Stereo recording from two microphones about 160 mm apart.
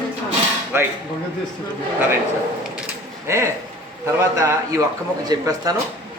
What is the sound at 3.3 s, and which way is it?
A man's voice, 15° right (ahead or behind).